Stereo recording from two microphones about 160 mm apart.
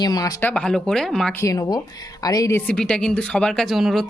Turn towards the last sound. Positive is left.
turn(degrees=0)  # may be behind; listen again after turning